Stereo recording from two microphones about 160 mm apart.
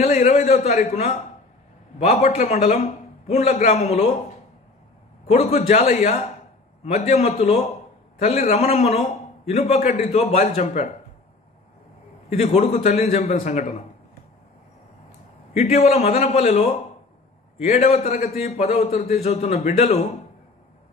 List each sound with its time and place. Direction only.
0.3 s a sound: 45° left (ahead or behind)
0.9 s a man's voice: 45° left (ahead or behind)
5.3 s a man's voice: 40° left (ahead or behind)
12.3 s a man's voice: 45° left (ahead or behind)
15.5 s a man's voice: 45° left (ahead or behind)